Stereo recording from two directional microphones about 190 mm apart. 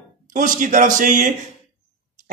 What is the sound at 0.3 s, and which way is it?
A man's voice, 45° right (ahead or behind).